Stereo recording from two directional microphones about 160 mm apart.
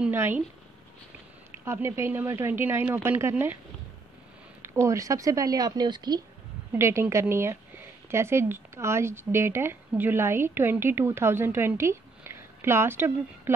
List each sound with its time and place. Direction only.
0.0 s a woman's voice: 15° right (ahead or behind)
1.6 s a woman's voice: 15° right (ahead or behind)
4.6 s speech: 15° right (ahead or behind)
6.7 s a woman's voice: 15° right (ahead or behind)